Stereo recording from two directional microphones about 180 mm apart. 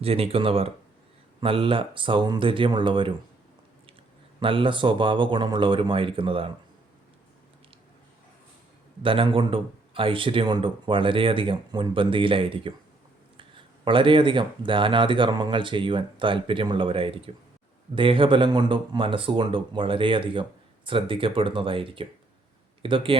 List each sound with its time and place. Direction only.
0.0 s speech: 30° right (ahead or behind)
4.4 s speech: 30° right (ahead or behind)
9.0 s speech: 30° right (ahead or behind)